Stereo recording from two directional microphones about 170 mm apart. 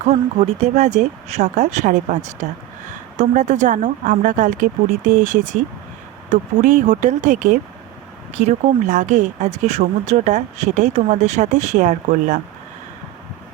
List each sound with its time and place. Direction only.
0.0 s speech: 35° right (ahead or behind)